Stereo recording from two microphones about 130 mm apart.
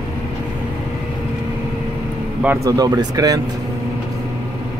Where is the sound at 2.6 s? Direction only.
30° right (ahead or behind).